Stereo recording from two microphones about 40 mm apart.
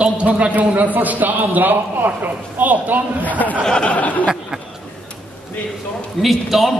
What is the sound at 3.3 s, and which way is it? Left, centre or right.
Speech, left.